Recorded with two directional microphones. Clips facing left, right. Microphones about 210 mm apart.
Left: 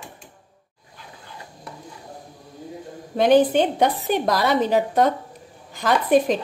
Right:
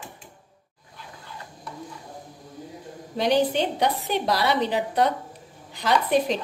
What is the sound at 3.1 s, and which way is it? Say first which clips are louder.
A woman's voice: left 6 dB; 50° left (ahead or behind).